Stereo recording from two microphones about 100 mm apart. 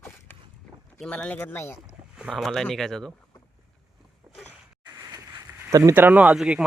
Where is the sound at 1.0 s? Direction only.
10° left (ahead or behind).